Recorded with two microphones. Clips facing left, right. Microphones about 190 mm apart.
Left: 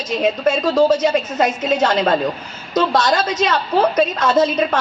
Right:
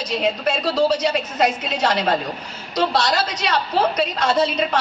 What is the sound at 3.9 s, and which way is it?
Speech, 50° left (ahead or behind).